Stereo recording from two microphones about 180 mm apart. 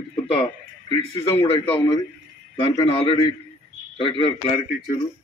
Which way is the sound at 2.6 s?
25° left (ahead or behind).